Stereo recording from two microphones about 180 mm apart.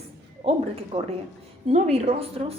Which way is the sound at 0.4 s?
30° right (ahead or behind).